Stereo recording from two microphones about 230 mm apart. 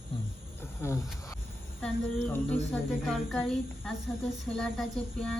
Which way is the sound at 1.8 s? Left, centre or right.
Centre.